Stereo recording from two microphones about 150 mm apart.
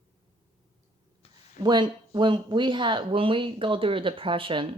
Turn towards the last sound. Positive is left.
turn(degrees=-35)  # may be behind; listen again after turning